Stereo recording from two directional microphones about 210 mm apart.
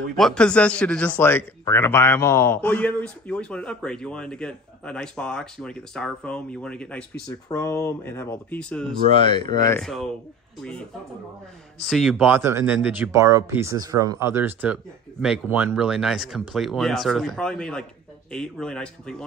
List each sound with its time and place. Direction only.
0.2 s speech: 5° left (ahead or behind)
9.3 s speech: 20° left (ahead or behind)
9.7 s speech: centre (ahead or behind)